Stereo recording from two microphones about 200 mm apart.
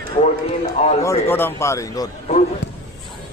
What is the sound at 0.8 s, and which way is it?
Speech, 30° left (ahead or behind).